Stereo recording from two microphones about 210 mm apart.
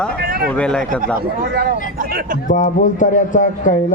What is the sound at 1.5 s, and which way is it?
Speech, 45° right (ahead or behind).